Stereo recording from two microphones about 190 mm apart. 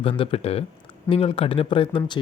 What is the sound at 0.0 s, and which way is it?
Speech, 30° left (ahead or behind).